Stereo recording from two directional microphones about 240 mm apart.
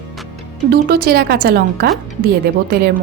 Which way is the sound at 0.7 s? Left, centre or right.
Right.